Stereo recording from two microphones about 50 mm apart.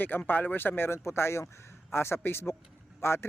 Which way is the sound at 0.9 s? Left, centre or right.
Left.